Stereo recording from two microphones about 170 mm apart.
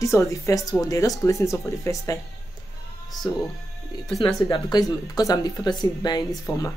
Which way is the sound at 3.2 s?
25° left (ahead or behind).